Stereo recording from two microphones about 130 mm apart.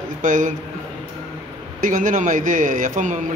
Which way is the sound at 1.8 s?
90° right.